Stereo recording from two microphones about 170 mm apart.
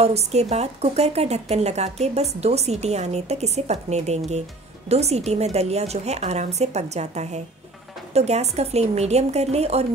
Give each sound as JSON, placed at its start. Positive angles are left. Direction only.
{"t": 0.0, "sound": "speech", "side_deg": -40}